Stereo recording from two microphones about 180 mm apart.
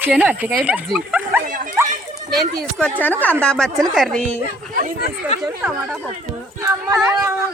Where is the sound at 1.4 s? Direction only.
45° right (ahead or behind).